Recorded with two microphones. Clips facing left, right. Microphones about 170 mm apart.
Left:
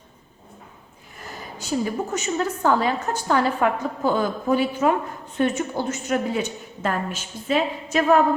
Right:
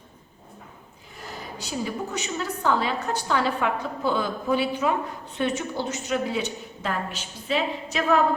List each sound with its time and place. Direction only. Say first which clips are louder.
1.2 s a woman's voice: even; 50° left (ahead or behind)